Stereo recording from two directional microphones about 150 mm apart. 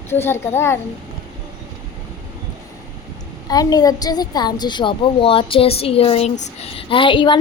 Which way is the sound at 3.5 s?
25° left (ahead or behind).